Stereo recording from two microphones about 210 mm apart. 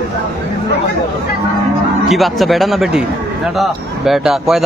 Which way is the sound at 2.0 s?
Centre (ahead or behind).